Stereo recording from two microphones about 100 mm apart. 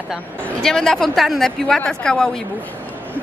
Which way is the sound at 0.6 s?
5° left (ahead or behind).